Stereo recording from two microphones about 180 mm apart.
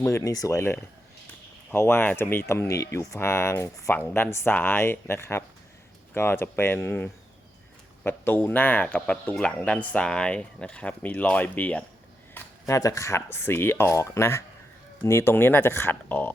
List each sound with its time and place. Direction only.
0.0 s speech: 15° left (ahead or behind)